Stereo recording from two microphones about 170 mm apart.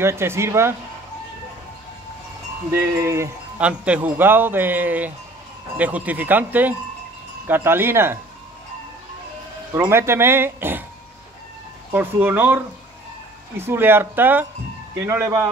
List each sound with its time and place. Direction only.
0.0 s speech: 15° right (ahead or behind)
2.7 s speech: 15° right (ahead or behind)
9.8 s speech: 15° right (ahead or behind)
11.9 s speech: 10° right (ahead or behind)
13.6 s speech: 15° right (ahead or behind)